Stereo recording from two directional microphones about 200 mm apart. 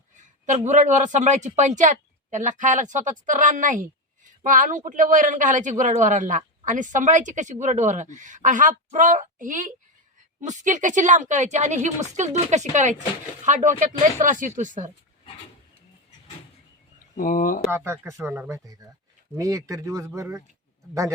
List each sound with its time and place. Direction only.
0.4 s speech: 35° right (ahead or behind)
17.2 s speech: 40° left (ahead or behind)
17.7 s speech: 10° right (ahead or behind)